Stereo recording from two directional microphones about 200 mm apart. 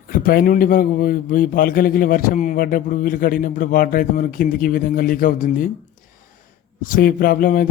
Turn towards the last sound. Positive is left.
turn(degrees=45)  # may be behind; listen again after turning